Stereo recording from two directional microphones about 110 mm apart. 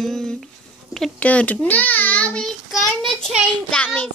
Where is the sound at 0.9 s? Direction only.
10° left (ahead or behind).